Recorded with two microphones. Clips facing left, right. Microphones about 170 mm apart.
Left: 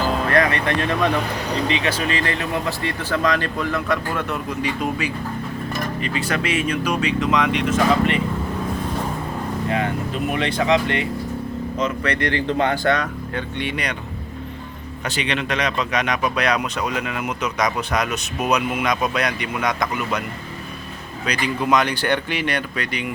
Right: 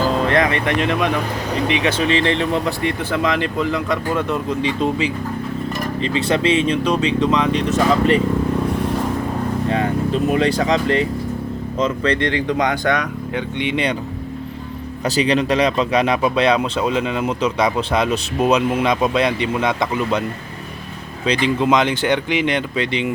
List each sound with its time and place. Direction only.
0.3 s speech: 20° right (ahead or behind)
9.6 s speech: 35° right (ahead or behind)
12.3 s speech: 15° right (ahead or behind)
15.0 s speech: 35° right (ahead or behind)
21.2 s speech: 25° right (ahead or behind)